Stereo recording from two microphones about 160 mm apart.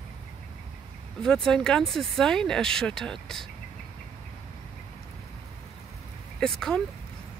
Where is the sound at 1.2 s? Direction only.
5° left (ahead or behind).